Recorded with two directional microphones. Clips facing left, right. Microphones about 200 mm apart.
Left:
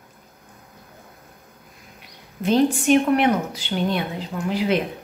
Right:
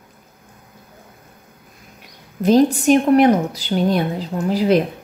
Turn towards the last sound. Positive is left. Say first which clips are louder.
# right 6 dB
turn(degrees=-40)  # may be behind; listen again after turning